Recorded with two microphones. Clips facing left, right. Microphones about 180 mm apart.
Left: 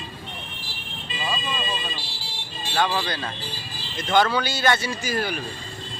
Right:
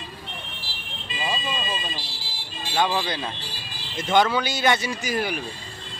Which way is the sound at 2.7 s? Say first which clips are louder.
Right 1 dB; 15° right (ahead or behind).